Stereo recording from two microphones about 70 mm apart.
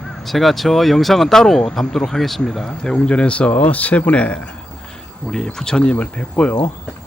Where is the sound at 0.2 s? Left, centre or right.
Centre.